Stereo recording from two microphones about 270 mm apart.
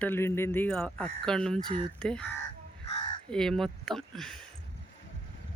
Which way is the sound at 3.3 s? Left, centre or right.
Centre.